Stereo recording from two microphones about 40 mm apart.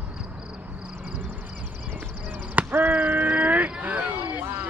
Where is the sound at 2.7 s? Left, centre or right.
Right.